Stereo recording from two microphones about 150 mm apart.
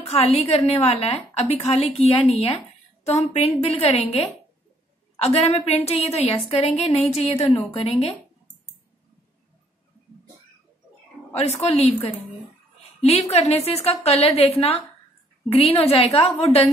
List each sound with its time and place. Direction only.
0.1 s a woman's voice: 40° left (ahead or behind)
11.7 s a woman's voice: 45° left (ahead or behind)